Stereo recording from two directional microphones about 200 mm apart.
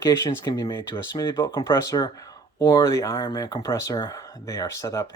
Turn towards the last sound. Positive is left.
turn(degrees=15)  # may be behind; listen again after turning